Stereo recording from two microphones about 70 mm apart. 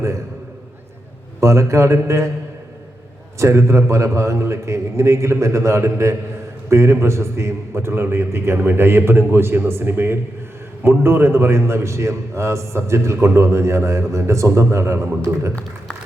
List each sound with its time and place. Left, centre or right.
1.4 s a man's voice: right
3.3 s a man's voice: right